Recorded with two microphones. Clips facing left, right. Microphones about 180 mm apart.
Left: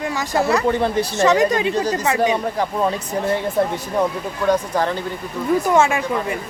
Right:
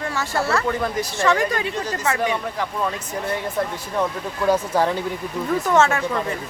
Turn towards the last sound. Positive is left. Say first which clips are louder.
# left 2 dB
turn(degrees=10)  # may be behind; listen again after turning